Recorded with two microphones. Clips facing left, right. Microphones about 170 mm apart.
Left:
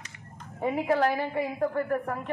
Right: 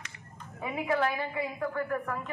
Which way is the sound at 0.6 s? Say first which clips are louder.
Left 4 dB; 35° left (ahead or behind).